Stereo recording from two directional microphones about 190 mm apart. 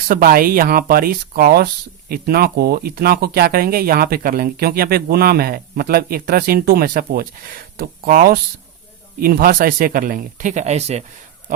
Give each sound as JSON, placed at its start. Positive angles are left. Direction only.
{"t": 0.1, "sound": "speech", "side_deg": -50}